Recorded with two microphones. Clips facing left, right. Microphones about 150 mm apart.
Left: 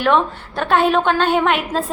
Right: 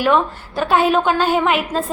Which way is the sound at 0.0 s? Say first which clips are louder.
Even; 5° right (ahead or behind).